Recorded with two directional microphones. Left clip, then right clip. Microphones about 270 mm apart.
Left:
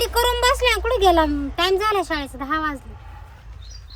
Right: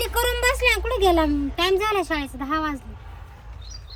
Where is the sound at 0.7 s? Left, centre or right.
Centre.